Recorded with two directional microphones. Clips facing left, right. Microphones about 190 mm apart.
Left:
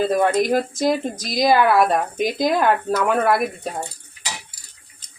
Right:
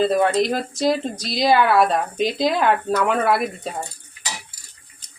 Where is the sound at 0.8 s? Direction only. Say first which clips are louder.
Even; 15° left (ahead or behind).